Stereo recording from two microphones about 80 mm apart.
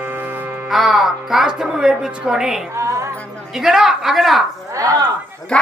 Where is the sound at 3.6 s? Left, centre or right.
Centre.